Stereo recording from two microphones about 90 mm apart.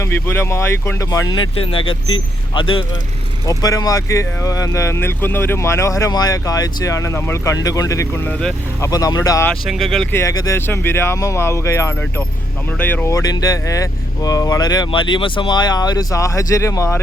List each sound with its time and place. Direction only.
0.0 s speech: 25° left (ahead or behind)
1.3 s speech: 75° left (ahead or behind)
3.4 s speech: 40° left (ahead or behind)
9.6 s speech: centre (ahead or behind)
10.2 s speech: 40° left (ahead or behind)
10.7 s speech: 25° left (ahead or behind)
12.8 s speech: 20° left (ahead or behind)
13.1 s speech: 35° left (ahead or behind)
14.9 s speech: 65° left (ahead or behind); by 17.0 s 30° left (ahead or behind)